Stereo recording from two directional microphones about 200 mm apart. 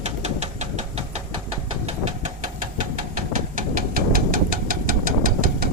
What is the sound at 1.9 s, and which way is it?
Engine, 35° right (ahead or behind).